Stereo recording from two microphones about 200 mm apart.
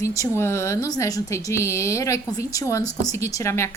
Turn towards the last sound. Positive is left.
turn(degrees=15)  # may be behind; listen again after turning